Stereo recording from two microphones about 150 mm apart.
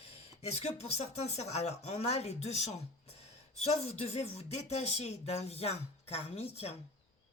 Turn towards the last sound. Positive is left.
turn(degrees=45)  # may be behind; listen again after turning